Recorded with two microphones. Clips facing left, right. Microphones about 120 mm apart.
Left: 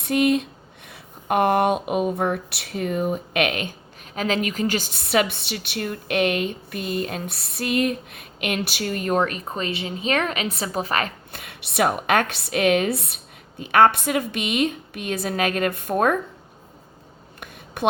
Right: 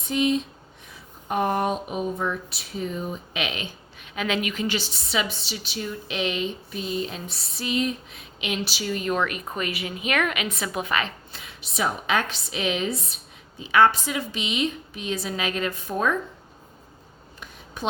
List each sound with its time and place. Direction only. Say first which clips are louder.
0.0 s speech: left 4 dB; 60° left (ahead or behind)
17.8 s speech: left 6 dB; 65° left (ahead or behind)